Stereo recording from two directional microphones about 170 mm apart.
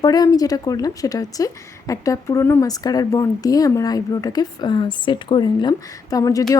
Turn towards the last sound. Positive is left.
turn(degrees=20)  # may be behind; listen again after turning